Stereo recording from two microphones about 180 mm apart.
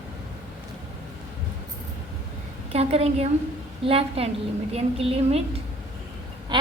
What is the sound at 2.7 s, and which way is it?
A woman's voice, 35° right (ahead or behind).